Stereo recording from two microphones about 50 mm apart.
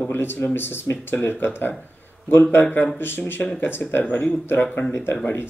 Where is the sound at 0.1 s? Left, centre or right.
Left.